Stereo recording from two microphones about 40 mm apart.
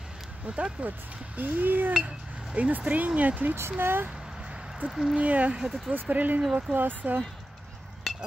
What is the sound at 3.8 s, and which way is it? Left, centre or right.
Speech, right.